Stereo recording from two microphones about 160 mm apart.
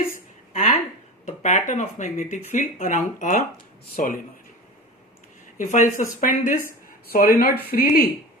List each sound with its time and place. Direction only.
0.5 s a sound: 40° left (ahead or behind)
1.2 s speech: 45° left (ahead or behind)
5.5 s speech: 50° left (ahead or behind)
7.1 s speech: 65° left (ahead or behind)